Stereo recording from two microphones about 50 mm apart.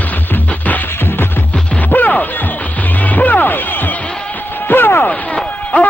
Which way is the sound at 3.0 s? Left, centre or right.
Left.